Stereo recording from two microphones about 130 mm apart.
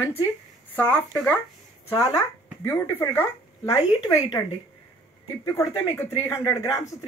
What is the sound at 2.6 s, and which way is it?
Speech, 15° left (ahead or behind).